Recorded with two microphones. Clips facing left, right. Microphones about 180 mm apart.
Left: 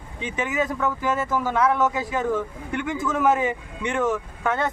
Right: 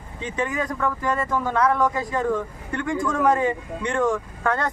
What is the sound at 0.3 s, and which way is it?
Speech, 5° left (ahead or behind).